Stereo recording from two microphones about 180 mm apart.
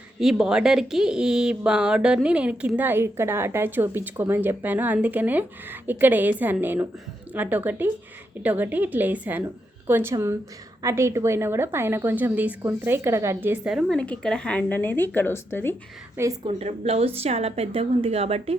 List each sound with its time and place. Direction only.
0.2 s speech: centre (ahead or behind); by 15.7 s 15° left (ahead or behind)
16.5 s speech: 35° right (ahead or behind)